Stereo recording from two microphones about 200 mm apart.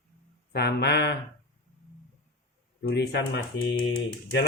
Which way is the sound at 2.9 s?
60° left (ahead or behind).